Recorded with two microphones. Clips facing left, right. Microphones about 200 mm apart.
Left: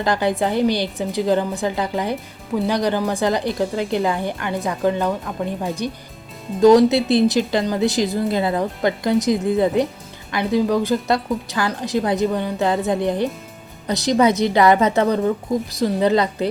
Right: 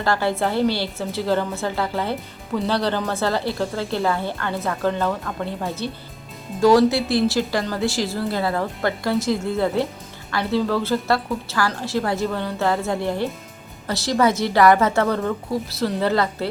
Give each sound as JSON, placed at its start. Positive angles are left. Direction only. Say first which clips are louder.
{"t": 0.0, "sound": "a woman's voice", "louder": "left 2 dB", "side_deg": 15}